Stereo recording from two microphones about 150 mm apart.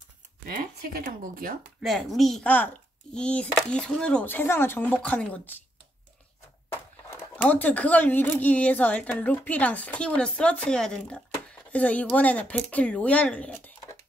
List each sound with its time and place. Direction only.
0.5 s speech: 70° right (ahead or behind)
1.8 s speech: centre (ahead or behind)
6.7 s speech: 15° left (ahead or behind)